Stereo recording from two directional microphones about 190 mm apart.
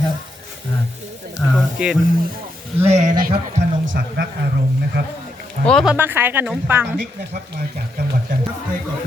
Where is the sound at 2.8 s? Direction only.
35° right (ahead or behind).